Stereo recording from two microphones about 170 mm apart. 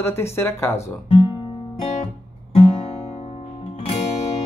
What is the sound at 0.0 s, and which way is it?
Speech, 15° left (ahead or behind).